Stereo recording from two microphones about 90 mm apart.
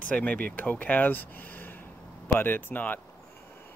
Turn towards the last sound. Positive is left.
turn(degrees=20)  # may be behind; listen again after turning